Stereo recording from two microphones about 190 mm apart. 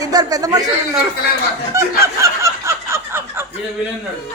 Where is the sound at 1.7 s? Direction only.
15° right (ahead or behind).